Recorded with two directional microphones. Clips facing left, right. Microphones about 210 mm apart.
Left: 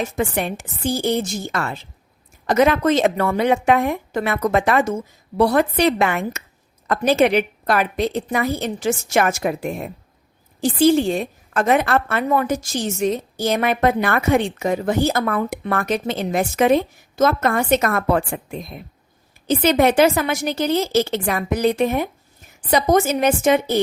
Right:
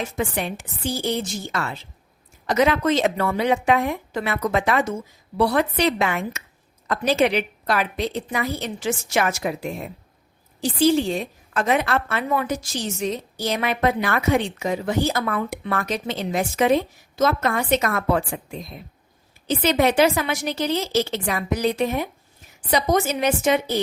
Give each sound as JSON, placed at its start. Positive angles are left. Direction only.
{"t": 0.0, "sound": "a woman's voice", "side_deg": 50}